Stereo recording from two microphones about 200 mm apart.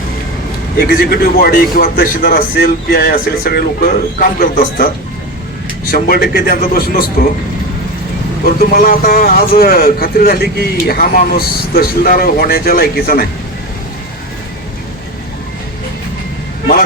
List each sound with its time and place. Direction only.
0.8 s speech: 50° left (ahead or behind)
8.5 s speech: 45° left (ahead or behind)